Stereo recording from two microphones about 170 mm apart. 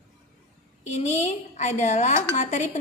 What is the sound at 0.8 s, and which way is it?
Speech, 40° left (ahead or behind).